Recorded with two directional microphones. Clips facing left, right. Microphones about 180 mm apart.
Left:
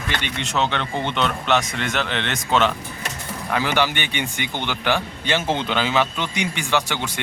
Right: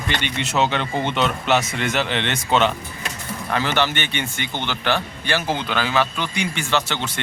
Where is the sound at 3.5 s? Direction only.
10° left (ahead or behind).